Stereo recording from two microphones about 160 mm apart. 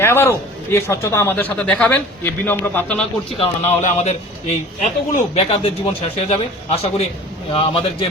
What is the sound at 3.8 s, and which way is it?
A man's voice, 45° left (ahead or behind).